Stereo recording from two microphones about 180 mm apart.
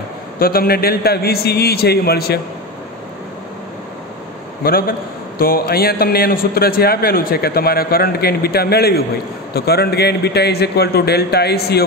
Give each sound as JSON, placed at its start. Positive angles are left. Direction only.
{"t": 0.4, "sound": "a man's voice", "side_deg": 55}
{"t": 4.6, "sound": "a man's voice", "side_deg": 55}